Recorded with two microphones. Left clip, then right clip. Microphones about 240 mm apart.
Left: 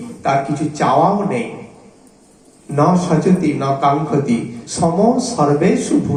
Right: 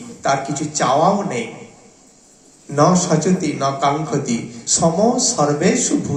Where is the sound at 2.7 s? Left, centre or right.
Right.